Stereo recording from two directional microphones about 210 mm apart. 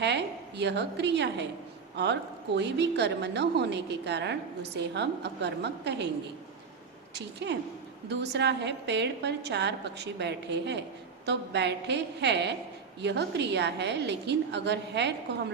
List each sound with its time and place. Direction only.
0.0 s a woman's voice: 55° right (ahead or behind)
7.1 s a woman's voice: 55° right (ahead or behind)